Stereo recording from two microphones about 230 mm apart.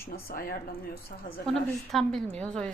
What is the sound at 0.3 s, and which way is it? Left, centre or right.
Speech, left.